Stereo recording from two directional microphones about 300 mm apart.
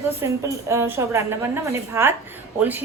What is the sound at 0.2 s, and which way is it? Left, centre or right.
A woman's voice, centre.